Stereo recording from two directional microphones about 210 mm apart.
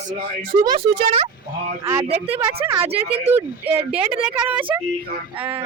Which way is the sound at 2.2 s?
30° right (ahead or behind).